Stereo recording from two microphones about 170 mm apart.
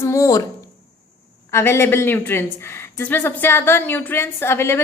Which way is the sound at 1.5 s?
15° left (ahead or behind).